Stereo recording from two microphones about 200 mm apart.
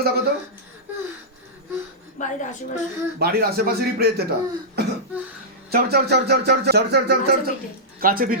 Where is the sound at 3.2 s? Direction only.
50° right (ahead or behind).